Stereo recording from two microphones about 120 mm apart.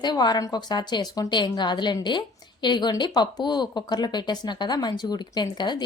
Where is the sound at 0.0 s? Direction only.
35° left (ahead or behind).